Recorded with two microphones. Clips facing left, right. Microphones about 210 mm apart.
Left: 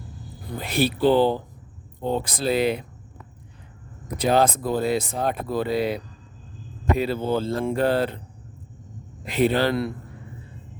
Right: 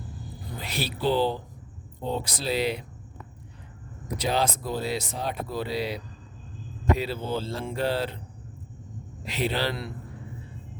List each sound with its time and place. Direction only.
0.6 s speech: 55° left (ahead or behind)
4.2 s speech: 50° left (ahead or behind)
9.2 s speech: 50° left (ahead or behind)